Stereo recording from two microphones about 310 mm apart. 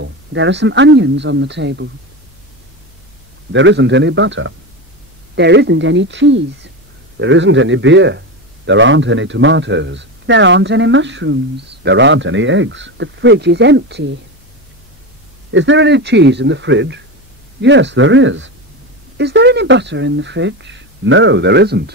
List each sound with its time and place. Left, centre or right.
0.0 s a man's voice: right
3.5 s a man's voice: right
15.5 s a man's voice: right